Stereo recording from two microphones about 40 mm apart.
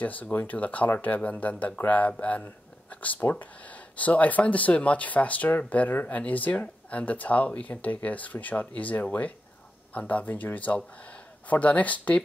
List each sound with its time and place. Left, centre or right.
0.0 s speech: left
2.9 s a sound: left
3.2 s speech: left
3.6 s speech: left
10.2 s speech: left